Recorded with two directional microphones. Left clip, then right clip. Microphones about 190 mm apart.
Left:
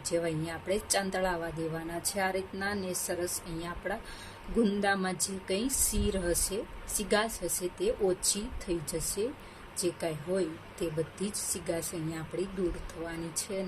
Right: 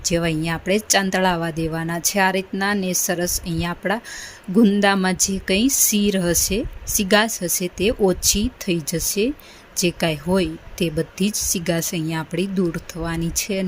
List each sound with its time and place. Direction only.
0.1 s speech: 50° right (ahead or behind)